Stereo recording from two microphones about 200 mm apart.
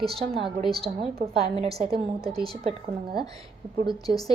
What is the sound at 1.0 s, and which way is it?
A woman's voice, 30° right (ahead or behind).